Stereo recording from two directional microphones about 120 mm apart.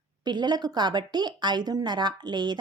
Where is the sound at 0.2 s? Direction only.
35° right (ahead or behind).